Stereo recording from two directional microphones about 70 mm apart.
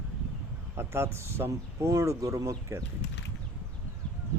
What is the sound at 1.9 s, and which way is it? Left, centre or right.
Speech, right.